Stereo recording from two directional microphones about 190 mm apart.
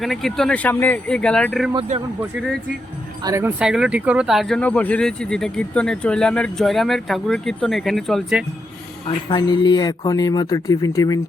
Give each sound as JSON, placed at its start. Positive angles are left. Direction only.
{"t": 0.0, "sound": "speech", "side_deg": 0}
{"t": 1.9, "sound": "speech", "side_deg": -35}
{"t": 3.2, "sound": "speech", "side_deg": -15}
{"t": 3.6, "sound": "speech", "side_deg": -5}
{"t": 9.0, "sound": "speech", "side_deg": 20}